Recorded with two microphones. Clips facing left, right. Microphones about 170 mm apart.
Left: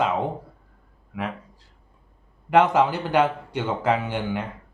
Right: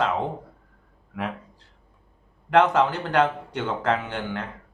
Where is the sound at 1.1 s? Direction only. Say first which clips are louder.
Even; centre (ahead or behind).